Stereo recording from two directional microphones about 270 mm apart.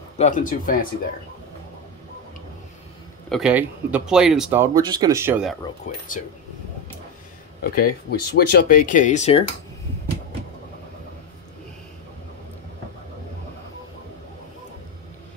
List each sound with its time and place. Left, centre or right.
0.2 s speech: left
3.3 s speech: centre
5.9 s speech: left
7.6 s speech: left